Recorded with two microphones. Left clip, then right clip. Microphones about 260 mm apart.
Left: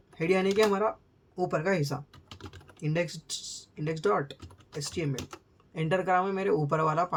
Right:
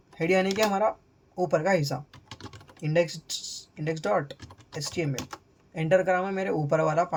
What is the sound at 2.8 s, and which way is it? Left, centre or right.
Speech, centre.